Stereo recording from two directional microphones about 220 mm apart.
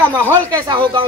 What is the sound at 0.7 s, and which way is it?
Speech, 20° right (ahead or behind).